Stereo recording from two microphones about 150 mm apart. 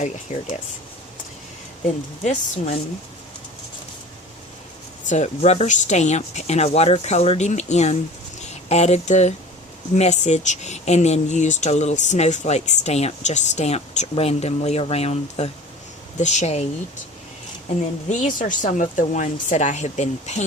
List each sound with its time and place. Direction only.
0.3 s speech: 50° left (ahead or behind)
2.2 s speech: 50° left (ahead or behind)
5.0 s speech: 50° left (ahead or behind)
18.1 s speech: 55° left (ahead or behind)